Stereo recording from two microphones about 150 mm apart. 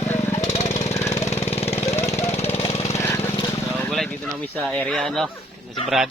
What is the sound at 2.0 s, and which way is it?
Engine, 20° left (ahead or behind).